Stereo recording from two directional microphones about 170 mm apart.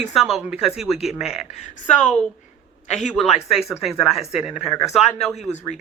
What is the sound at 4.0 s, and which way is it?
Speech, centre (ahead or behind).